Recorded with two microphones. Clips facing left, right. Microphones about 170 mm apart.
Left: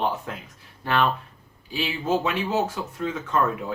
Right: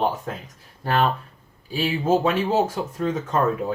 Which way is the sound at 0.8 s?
40° right (ahead or behind).